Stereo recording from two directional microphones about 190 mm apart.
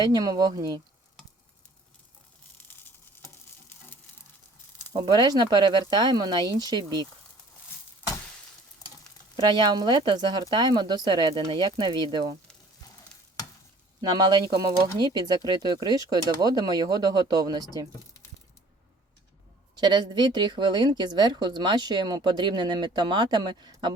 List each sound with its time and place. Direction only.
0.0 s speech: 20° right (ahead or behind)
3.2 s frying: 10° left (ahead or behind)
4.9 s speech: 20° right (ahead or behind)
9.3 s speech: 25° right (ahead or behind)
14.1 s speech: 20° right (ahead or behind)
19.7 s speech: 25° right (ahead or behind)